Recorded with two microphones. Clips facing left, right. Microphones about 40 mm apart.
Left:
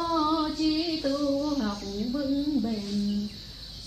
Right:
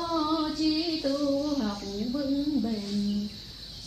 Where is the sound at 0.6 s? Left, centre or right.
Centre.